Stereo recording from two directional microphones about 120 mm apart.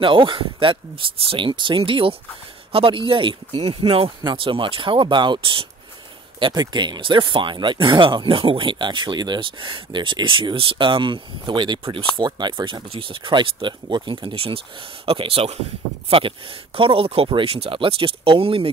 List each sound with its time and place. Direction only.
0.0 s speech: 45° right (ahead or behind)